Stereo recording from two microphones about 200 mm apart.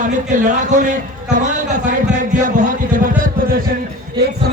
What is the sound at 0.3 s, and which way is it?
Speech, 40° right (ahead or behind).